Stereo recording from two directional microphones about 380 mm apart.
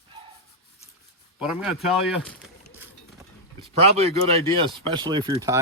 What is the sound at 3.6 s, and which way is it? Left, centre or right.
Speech, centre.